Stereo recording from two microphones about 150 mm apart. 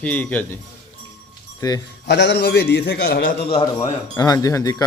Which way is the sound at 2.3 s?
90° left.